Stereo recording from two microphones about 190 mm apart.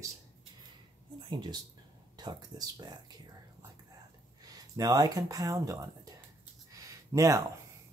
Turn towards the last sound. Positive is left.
turn(degrees=-15)  # may be behind; listen again after turning